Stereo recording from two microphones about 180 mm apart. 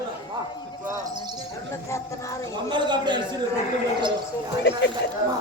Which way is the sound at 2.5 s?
25° right (ahead or behind).